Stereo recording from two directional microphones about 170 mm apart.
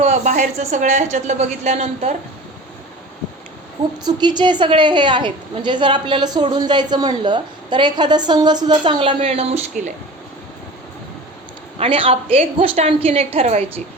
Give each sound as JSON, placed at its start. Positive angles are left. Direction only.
{"t": 0.0, "sound": "a woman's voice", "side_deg": -45}
{"t": 4.0, "sound": "a woman's voice", "side_deg": -25}
{"t": 11.8, "sound": "a woman's voice", "side_deg": -30}